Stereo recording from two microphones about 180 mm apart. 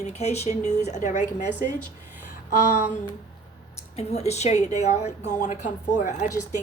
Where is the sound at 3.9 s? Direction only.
35° left (ahead or behind).